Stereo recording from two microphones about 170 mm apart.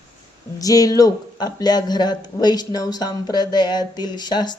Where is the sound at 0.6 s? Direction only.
20° left (ahead or behind).